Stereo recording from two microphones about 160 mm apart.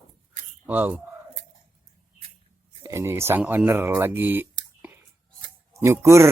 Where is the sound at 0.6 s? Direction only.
10° right (ahead or behind).